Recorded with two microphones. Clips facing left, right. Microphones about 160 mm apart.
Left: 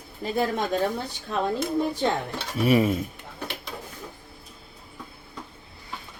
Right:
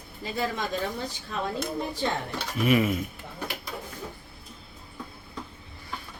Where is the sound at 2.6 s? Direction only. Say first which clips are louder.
Left 3 dB; 35° left (ahead or behind).